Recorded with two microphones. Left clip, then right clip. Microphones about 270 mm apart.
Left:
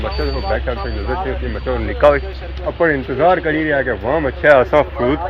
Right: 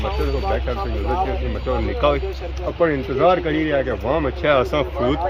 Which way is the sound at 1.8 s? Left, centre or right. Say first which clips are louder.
Left 8 dB; centre.